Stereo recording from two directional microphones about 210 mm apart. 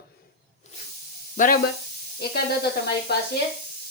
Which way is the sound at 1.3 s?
40° left (ahead or behind).